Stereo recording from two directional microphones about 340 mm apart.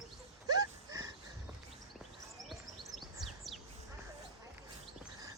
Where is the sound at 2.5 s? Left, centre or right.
Centre.